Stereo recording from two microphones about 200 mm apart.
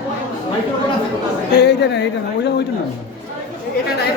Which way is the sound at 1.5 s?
60° left (ahead or behind).